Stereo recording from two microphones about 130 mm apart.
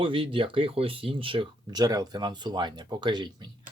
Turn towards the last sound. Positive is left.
turn(degrees=-35)  # may be behind; listen again after turning